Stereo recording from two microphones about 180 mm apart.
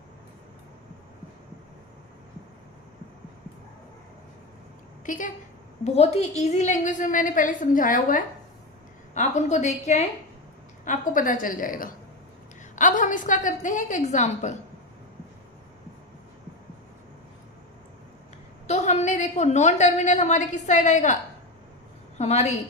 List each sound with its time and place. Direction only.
5.0 s a woman's voice: 45° left (ahead or behind)
18.7 s a woman's voice: 40° left (ahead or behind)
22.2 s a woman's voice: 35° left (ahead or behind)